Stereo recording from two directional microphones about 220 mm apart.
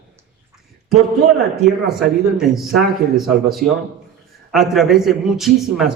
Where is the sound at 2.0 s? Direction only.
Centre (ahead or behind).